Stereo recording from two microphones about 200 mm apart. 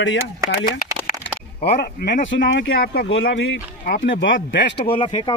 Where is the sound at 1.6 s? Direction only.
50° left (ahead or behind).